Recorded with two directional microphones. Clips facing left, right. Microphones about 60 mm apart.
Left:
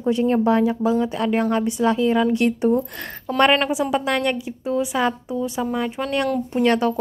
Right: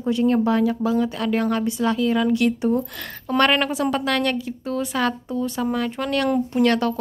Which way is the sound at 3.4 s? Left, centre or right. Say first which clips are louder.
Left 2 dB; centre.